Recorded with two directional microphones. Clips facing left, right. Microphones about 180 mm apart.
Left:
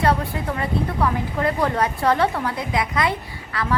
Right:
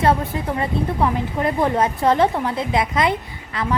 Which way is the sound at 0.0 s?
20° right (ahead or behind).